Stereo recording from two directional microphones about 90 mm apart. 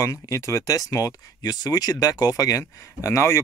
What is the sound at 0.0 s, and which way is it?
Speech, 40° left (ahead or behind).